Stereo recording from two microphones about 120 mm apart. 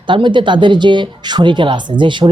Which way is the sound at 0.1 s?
40° right (ahead or behind).